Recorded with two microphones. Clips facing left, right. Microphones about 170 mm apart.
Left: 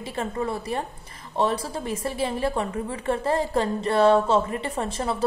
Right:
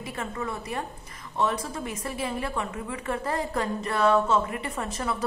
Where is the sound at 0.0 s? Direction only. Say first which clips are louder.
Left 5 dB; 30° left (ahead or behind).